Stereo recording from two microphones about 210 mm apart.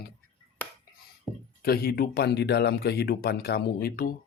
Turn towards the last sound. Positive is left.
turn(degrees=45)  # may be behind; listen again after turning